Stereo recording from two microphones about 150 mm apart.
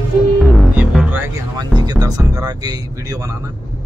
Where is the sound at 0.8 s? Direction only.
10° right (ahead or behind).